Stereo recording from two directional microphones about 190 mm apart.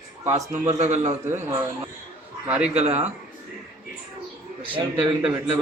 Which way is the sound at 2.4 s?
5° right (ahead or behind).